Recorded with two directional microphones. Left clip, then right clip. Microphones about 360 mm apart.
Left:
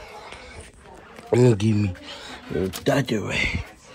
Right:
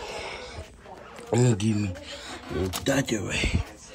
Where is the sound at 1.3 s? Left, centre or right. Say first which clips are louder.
Left 6 dB; centre.